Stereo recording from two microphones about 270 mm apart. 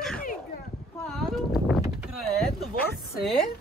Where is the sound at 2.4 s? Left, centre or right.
Centre.